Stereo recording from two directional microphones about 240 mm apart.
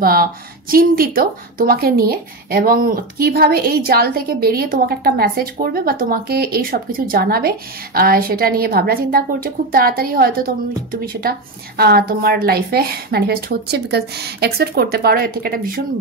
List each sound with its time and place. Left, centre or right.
0.0 s speech: right